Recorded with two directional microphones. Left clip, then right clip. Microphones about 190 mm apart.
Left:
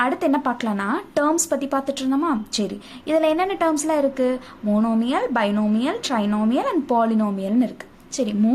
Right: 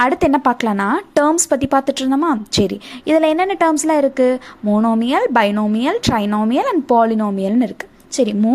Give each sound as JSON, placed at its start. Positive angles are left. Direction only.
{"t": 0.0, "sound": "speech", "side_deg": -40}